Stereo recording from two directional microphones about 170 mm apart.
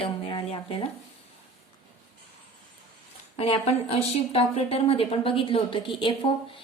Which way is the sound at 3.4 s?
35° left (ahead or behind).